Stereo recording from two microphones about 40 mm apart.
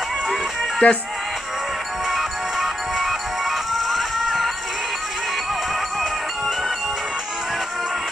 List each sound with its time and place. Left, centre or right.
0.8 s speech: left
2.0 s music: centre